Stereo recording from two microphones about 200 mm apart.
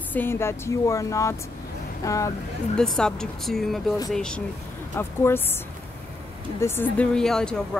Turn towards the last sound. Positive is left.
turn(degrees=5)  # may be behind; listen again after turning